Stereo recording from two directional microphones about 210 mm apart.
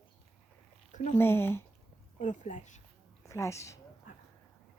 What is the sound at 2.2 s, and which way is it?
Speech, 35° left (ahead or behind).